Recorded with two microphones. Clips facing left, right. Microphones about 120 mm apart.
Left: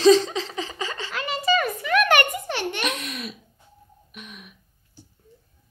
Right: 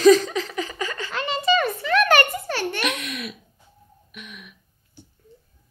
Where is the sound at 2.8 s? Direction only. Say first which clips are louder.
Right 1 dB; 35° left (ahead or behind).